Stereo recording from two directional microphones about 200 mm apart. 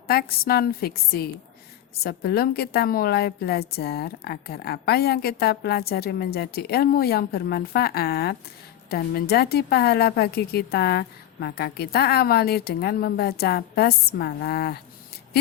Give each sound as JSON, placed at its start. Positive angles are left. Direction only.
{"t": 0.1, "sound": "a woman's voice", "side_deg": 50}